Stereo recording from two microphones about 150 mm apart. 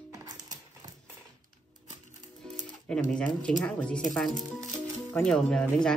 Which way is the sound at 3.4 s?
10° left (ahead or behind).